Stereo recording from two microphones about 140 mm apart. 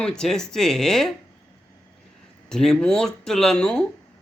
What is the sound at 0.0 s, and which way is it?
Speech, 5° left (ahead or behind).